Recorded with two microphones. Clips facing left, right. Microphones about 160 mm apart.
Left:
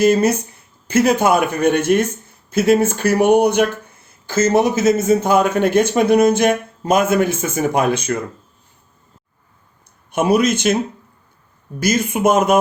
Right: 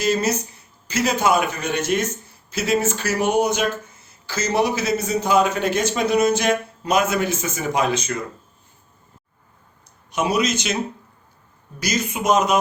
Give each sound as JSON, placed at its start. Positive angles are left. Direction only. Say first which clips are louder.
{"t": 0.0, "sound": "a man's voice", "louder": "left 7 dB", "side_deg": 55}
{"t": 10.1, "sound": "speech", "louder": "left 6 dB", "side_deg": 55}
{"t": 11.8, "sound": "speech", "louder": "left 7 dB", "side_deg": 55}